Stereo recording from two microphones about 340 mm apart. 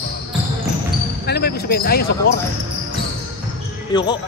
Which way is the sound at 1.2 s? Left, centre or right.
Left.